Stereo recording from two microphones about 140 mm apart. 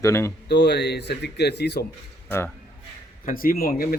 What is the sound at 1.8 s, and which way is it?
Speech, 90° left.